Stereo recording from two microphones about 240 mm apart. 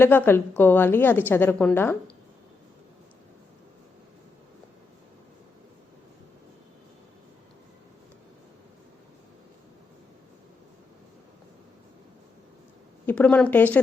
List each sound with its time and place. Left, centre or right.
0.0 s a woman's voice: centre
13.1 s a woman's voice: centre